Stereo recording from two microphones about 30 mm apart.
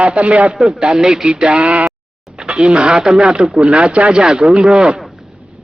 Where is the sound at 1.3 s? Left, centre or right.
Right.